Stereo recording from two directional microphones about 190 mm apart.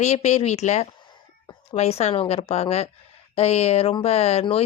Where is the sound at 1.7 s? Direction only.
35° left (ahead or behind).